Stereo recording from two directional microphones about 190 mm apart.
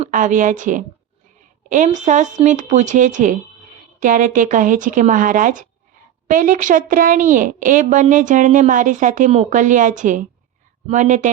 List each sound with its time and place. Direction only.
0.0 s a woman's voice: 40° right (ahead or behind)